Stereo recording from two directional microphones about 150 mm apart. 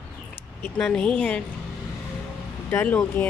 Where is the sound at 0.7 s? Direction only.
5° left (ahead or behind).